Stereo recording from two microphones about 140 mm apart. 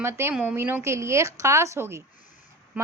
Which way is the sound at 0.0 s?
15° right (ahead or behind).